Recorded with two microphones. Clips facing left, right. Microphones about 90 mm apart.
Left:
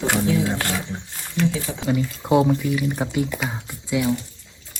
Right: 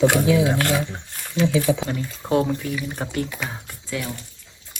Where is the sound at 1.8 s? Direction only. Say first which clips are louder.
Left 5 dB; 10° left (ahead or behind).